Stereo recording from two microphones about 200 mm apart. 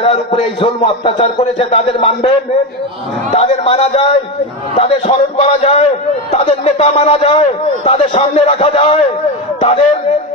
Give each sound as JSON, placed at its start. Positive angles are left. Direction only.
{"t": 0.0, "sound": "a man's voice", "side_deg": 25}